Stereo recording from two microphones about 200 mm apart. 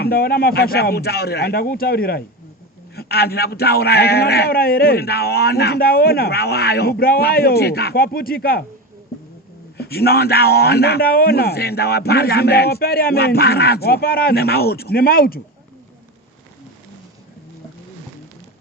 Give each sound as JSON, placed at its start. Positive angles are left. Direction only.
{"t": 0.0, "sound": "a man's voice", "side_deg": 50}
{"t": 9.7, "sound": "a man's voice", "side_deg": 50}